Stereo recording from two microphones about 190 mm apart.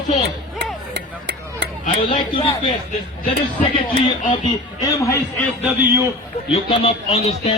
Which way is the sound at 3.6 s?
25° left (ahead or behind).